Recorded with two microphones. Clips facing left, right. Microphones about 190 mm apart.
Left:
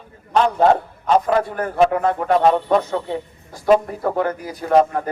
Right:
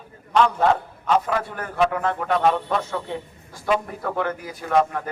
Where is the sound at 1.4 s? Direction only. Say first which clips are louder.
Left 5 dB; 45° left (ahead or behind).